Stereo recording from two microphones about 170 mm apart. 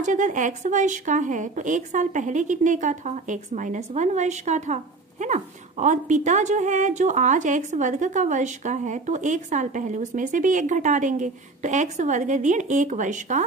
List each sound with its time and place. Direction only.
0.0 s a woman's voice: 50° right (ahead or behind)